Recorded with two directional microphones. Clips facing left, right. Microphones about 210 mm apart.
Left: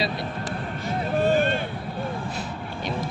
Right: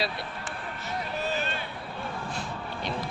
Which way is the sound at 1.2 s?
50° left (ahead or behind).